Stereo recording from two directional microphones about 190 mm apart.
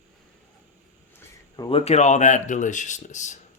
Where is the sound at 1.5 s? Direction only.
25° left (ahead or behind).